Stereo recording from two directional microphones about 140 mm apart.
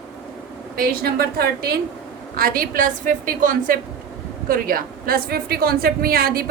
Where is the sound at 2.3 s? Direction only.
90° right.